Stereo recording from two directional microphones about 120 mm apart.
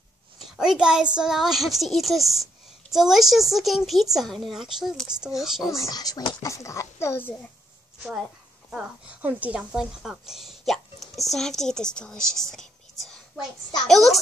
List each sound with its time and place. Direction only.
0.6 s a woman's voice: 5° right (ahead or behind)
5.8 s a child's voice: 30° left (ahead or behind)
8.6 s a woman's voice: 15° right (ahead or behind)